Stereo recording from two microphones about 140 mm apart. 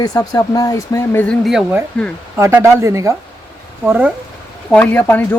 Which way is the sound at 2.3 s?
20° right (ahead or behind).